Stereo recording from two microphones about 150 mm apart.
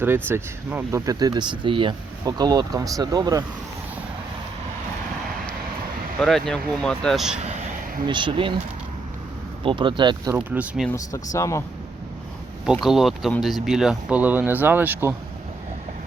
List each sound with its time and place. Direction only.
0.0 s speech: 15° right (ahead or behind)
6.1 s speech: centre (ahead or behind)
8.0 s speech: 35° right (ahead or behind)
9.6 s speech: 35° right (ahead or behind)
10.3 s speech: 10° right (ahead or behind)
10.9 s speech: 20° left (ahead or behind)
12.8 s speech: centre (ahead or behind)